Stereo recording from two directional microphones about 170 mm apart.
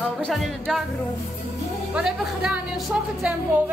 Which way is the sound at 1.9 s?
Centre (ahead or behind).